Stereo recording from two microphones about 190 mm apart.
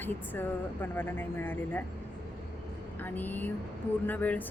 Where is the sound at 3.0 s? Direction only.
10° left (ahead or behind).